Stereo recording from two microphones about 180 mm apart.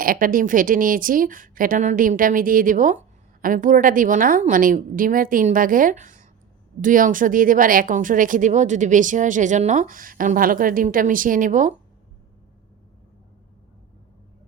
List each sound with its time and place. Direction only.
0.0 s speech: 50° right (ahead or behind)